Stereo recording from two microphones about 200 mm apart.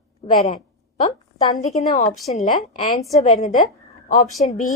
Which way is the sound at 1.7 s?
35° left (ahead or behind).